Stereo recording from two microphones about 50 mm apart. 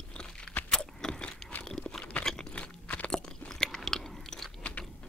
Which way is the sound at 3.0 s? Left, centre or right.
Centre.